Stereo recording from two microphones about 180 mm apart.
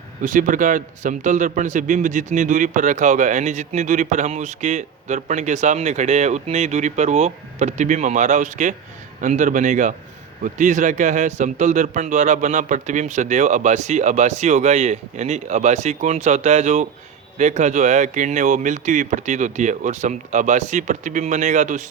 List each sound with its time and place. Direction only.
0.2 s a man's voice: 45° right (ahead or behind)